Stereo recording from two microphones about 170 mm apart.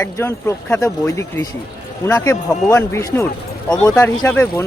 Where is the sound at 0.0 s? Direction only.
15° left (ahead or behind).